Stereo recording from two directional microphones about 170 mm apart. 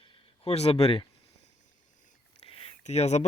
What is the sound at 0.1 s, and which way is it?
Speech, 35° left (ahead or behind).